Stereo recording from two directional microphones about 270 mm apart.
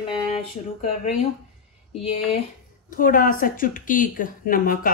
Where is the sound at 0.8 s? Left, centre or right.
Left.